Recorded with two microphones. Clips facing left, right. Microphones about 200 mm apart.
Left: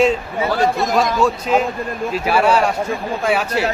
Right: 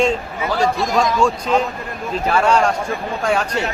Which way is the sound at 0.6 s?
50° left (ahead or behind).